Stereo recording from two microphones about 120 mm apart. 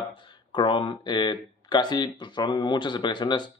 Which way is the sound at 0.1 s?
40° left (ahead or behind).